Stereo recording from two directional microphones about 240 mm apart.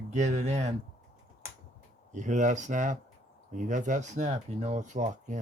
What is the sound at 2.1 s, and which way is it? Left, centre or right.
Speech, right.